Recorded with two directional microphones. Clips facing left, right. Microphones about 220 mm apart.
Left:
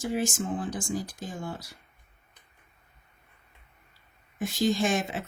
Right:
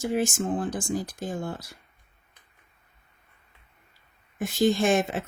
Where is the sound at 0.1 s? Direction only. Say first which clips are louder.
Right 3 dB; 55° right (ahead or behind).